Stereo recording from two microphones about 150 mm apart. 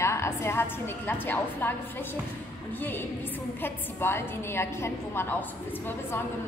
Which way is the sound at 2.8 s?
15° left (ahead or behind).